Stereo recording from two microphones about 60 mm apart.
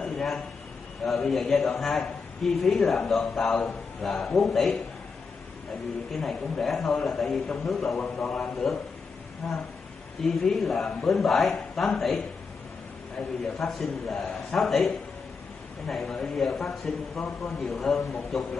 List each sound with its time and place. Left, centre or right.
0.0 s a sound: centre
1.0 s a man's voice: centre
6.1 s a man's voice: centre
8.0 s a man's voice: centre
10.2 s a man's voice: centre
13.6 s a man's voice: centre